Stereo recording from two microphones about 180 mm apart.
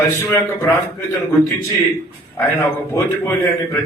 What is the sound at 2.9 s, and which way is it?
Speech, 15° left (ahead or behind).